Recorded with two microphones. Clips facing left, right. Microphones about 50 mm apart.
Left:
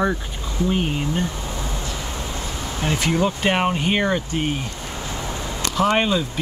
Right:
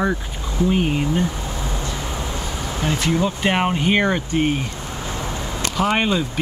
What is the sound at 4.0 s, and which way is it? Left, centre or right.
Speech, centre.